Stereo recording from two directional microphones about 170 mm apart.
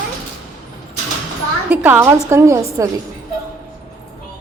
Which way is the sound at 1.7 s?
10° right (ahead or behind).